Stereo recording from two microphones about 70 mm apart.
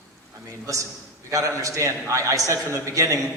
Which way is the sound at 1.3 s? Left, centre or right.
Right.